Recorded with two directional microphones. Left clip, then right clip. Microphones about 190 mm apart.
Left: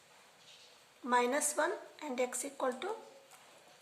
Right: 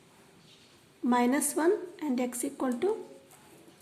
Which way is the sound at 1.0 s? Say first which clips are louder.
Right 4 dB; 25° right (ahead or behind).